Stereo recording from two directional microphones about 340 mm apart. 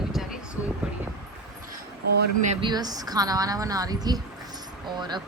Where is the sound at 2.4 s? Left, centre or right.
Centre.